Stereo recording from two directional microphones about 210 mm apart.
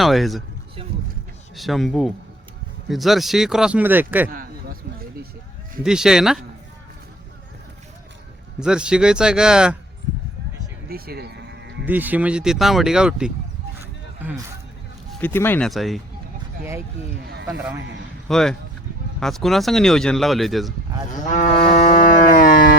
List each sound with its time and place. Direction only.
0.0 s speech: centre (ahead or behind)
1.5 s speech: centre (ahead or behind)
4.3 s a sound: 45° right (ahead or behind)
5.8 s speech: 5° right (ahead or behind)
8.6 s speech: 5° right (ahead or behind)
10.8 s sheep: 45° right (ahead or behind)
11.9 s speech: 10° right (ahead or behind)
15.1 s speech: 10° left (ahead or behind)
17.4 s speech: 5° right (ahead or behind)
21.1 s moo: 35° left (ahead or behind)
22.0 s civil defense siren: 35° left (ahead or behind)